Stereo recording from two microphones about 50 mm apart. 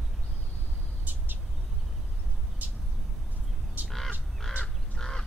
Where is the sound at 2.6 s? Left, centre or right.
Right.